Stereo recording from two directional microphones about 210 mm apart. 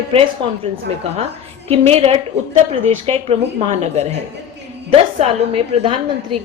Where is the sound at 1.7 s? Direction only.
30° right (ahead or behind).